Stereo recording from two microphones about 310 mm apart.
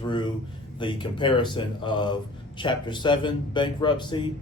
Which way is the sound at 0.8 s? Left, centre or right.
Centre.